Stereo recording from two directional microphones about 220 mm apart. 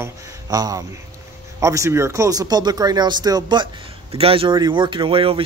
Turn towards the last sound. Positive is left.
turn(degrees=-25)  # may be behind; listen again after turning